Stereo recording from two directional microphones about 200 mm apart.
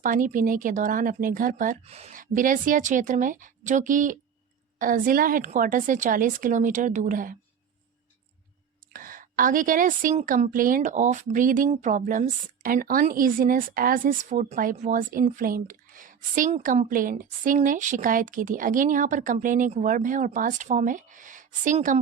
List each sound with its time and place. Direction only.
0.0 s a woman's voice: 40° right (ahead or behind)
8.9 s a woman's voice: 45° right (ahead or behind)